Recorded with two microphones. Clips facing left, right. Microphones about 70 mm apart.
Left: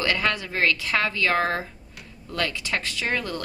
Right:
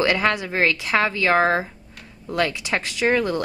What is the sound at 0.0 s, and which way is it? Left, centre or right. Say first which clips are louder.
A woman's voice: right 5 dB; centre.